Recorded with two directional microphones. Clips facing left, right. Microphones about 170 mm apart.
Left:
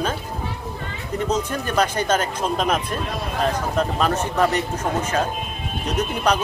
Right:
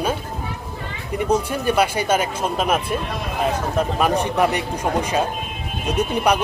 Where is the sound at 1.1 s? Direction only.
10° right (ahead or behind).